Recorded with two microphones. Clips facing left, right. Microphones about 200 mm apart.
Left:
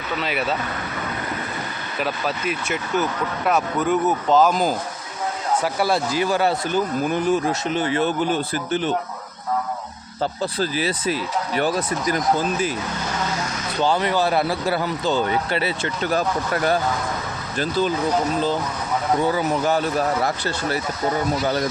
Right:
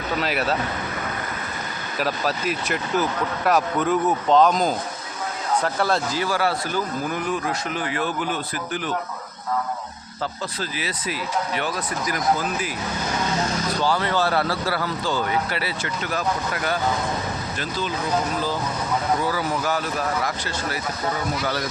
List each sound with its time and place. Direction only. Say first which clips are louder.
0.2 s speech: even; centre (ahead or behind)
2.0 s speech: right 1 dB; centre (ahead or behind)
3.4 s speech: even; centre (ahead or behind); by 9.0 s 25° left (ahead or behind)
10.4 s speech: left 7 dB; 35° left (ahead or behind)
13.8 s speech: left 3 dB; 20° left (ahead or behind)
16.1 s speech: left 3 dB; 40° left (ahead or behind)
19.2 s speech: left 4 dB; 20° left (ahead or behind)